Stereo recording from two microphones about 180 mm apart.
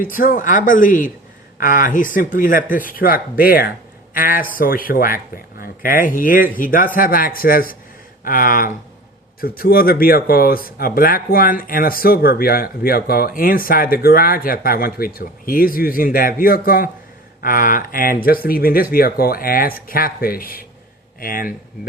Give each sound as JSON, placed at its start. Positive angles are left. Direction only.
{"t": 0.0, "sound": "speech", "side_deg": 50}